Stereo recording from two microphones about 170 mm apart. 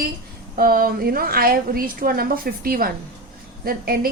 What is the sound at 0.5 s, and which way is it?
A woman's voice, 60° right (ahead or behind).